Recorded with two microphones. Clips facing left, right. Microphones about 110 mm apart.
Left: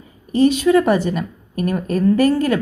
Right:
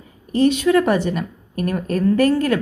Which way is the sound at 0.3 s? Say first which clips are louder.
Left 2 dB; centre (ahead or behind).